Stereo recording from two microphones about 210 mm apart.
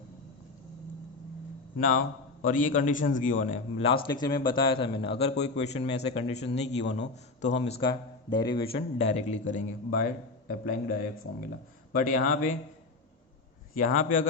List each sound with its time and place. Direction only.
2.4 s a man's voice: 40° left (ahead or behind)
13.7 s speech: 40° left (ahead or behind)